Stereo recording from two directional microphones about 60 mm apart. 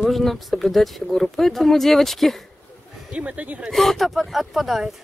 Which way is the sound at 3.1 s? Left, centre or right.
Right.